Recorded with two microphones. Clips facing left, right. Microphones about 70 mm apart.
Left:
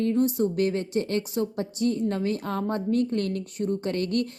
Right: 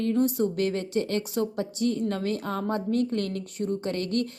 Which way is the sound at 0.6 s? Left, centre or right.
Left.